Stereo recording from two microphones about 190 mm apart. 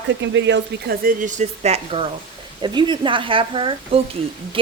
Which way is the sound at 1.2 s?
40° right (ahead or behind).